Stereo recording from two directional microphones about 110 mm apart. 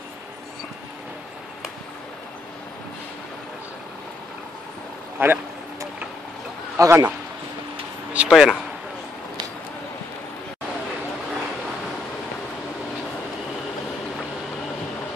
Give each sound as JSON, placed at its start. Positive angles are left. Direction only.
{"t": 5.2, "sound": "speech", "side_deg": -20}
{"t": 6.8, "sound": "a man's voice", "side_deg": -30}
{"t": 8.1, "sound": "a sound", "side_deg": -10}